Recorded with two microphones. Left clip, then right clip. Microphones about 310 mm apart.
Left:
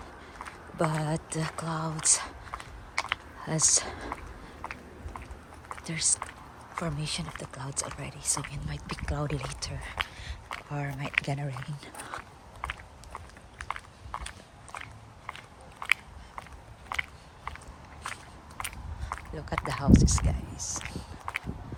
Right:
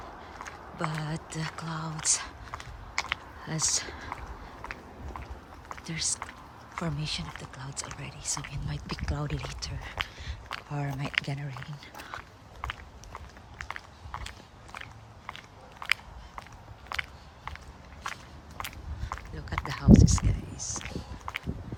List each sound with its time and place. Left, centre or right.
0.8 s speech: centre
3.0 s a sound: centre
5.8 s speech: centre
12.6 s biting: centre
18.0 s walk: centre